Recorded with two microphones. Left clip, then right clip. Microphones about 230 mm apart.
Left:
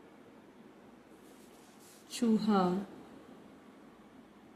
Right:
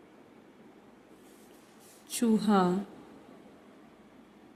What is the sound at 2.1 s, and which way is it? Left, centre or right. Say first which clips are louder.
Speech: right 4 dB; right.